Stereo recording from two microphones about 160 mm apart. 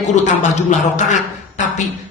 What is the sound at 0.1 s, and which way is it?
A woman's voice, 50° left (ahead or behind).